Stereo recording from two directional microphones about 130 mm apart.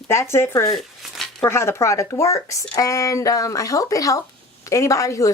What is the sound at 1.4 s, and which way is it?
Speech, 20° left (ahead or behind).